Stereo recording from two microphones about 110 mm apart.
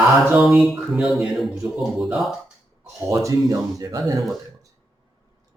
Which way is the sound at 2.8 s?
30° right (ahead or behind).